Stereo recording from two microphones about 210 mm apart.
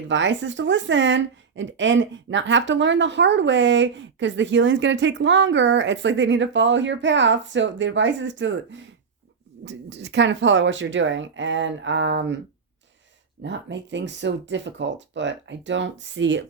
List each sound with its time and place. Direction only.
0.1 s speech: 60° right (ahead or behind)
13.4 s speech: 55° right (ahead or behind)